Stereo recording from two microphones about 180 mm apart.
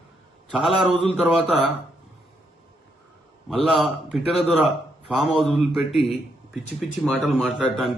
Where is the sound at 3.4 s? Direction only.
Centre (ahead or behind).